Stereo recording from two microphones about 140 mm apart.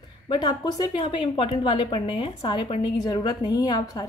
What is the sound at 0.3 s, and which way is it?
A woman's voice, 30° left (ahead or behind).